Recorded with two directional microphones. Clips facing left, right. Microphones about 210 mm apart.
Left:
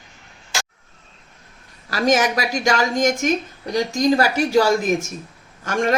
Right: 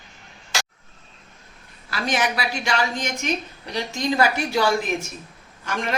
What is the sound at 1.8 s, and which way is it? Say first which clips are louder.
A woman's voice: left 6 dB; 40° left (ahead or behind).